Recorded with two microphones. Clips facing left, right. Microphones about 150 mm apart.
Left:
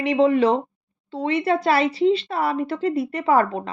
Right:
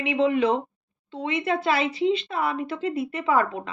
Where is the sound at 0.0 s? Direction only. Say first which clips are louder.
Left 4 dB; 40° left (ahead or behind).